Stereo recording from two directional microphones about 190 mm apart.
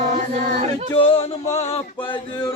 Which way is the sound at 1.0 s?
30° left (ahead or behind).